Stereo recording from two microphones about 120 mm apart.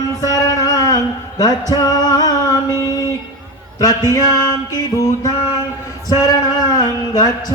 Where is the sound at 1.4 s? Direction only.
30° left (ahead or behind).